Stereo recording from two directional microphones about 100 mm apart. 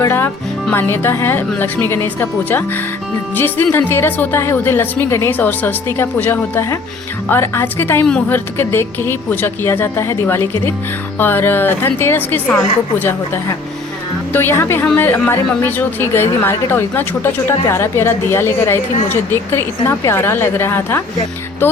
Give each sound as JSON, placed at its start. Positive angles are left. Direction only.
{"t": 0.0, "sound": "speech", "side_deg": 25}